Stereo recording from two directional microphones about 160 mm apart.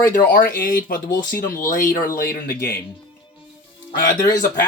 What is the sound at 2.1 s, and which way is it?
Speech, 65° left (ahead or behind).